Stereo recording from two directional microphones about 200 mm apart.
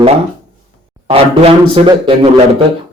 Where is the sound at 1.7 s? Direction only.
25° right (ahead or behind).